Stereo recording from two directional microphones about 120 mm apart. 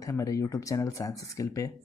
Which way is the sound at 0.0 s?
30° left (ahead or behind).